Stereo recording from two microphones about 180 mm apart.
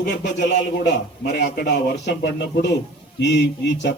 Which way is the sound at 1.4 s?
70° left (ahead or behind).